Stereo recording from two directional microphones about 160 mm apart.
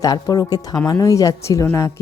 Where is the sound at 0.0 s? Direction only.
25° left (ahead or behind).